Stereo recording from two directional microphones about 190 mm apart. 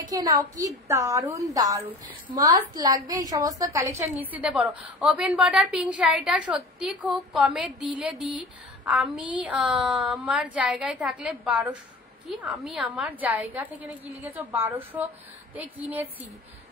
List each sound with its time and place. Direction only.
0.1 s a woman's voice: 20° right (ahead or behind); by 7.7 s centre (ahead or behind)
8.8 s a woman's voice: 5° right (ahead or behind)